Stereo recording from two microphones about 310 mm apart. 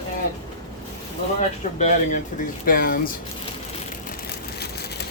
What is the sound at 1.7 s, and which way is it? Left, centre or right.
Speech, left.